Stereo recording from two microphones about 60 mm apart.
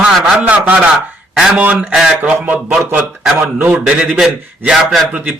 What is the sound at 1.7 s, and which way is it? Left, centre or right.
A man's voice, centre.